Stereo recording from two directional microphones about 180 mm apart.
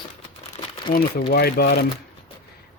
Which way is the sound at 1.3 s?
60° left (ahead or behind).